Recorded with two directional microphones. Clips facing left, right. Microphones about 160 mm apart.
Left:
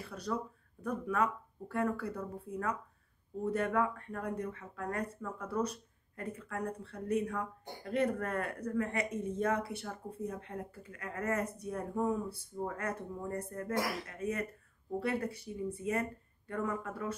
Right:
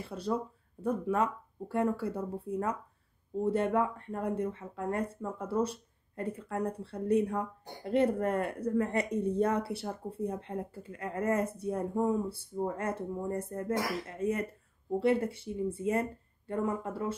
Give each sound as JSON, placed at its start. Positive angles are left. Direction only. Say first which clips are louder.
{"t": 0.0, "sound": "speech", "louder": "right 4 dB", "side_deg": -25}